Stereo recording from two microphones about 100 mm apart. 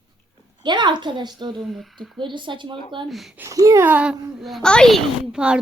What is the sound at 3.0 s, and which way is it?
Speech, centre (ahead or behind).